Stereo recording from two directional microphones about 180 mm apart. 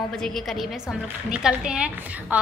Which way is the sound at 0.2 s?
Centre (ahead or behind).